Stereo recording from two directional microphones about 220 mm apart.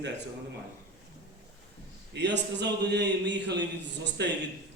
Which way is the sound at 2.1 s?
50° right (ahead or behind).